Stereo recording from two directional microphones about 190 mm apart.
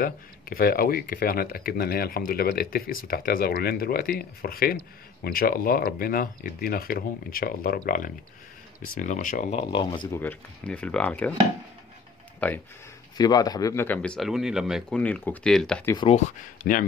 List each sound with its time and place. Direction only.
0.0 s speech: 50° left (ahead or behind)
9.7 s speech: 25° left (ahead or behind)
10.1 s speech: 10° left (ahead or behind)
12.4 s speech: 10° left (ahead or behind)
13.2 s speech: 20° left (ahead or behind); by 15.8 s 5° left (ahead or behind)
15.8 s speech: 20° left (ahead or behind)
16.6 s speech: 55° left (ahead or behind)